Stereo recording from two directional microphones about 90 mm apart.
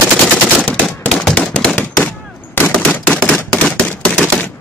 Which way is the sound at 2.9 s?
15° left (ahead or behind).